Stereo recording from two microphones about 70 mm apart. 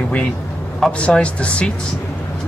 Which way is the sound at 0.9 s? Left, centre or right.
Centre.